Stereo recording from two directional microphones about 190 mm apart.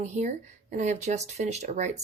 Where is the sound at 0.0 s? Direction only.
35° right (ahead or behind).